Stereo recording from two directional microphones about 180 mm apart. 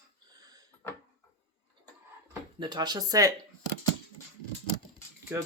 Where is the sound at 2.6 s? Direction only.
25° right (ahead or behind).